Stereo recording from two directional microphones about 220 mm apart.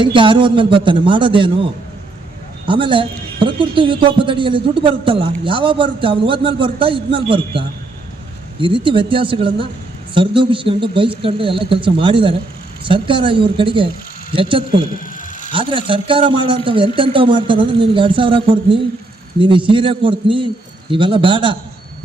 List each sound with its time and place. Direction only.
0.0 s a man's voice: 20° right (ahead or behind)
8.6 s a man's voice: 20° right (ahead or behind)
14.9 s a sound: 35° left (ahead or behind)
15.5 s a man's voice: 25° right (ahead or behind)